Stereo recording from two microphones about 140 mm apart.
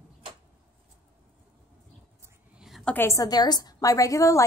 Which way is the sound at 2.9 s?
20° left (ahead or behind).